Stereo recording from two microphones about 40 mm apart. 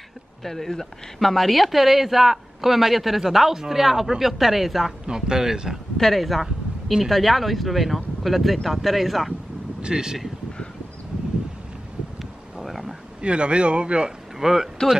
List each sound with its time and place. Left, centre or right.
0.4 s a woman's voice: centre
5.0 s speech: centre
5.9 s a woman's voice: centre
9.8 s speech: centre
12.2 s a sound: centre
13.2 s speech: right
14.4 s speech: centre